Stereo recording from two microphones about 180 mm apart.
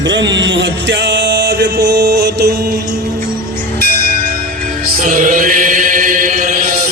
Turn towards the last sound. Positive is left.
turn(degrees=-50)  # may be behind; listen again after turning